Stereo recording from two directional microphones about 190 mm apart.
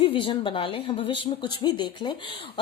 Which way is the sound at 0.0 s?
30° left (ahead or behind).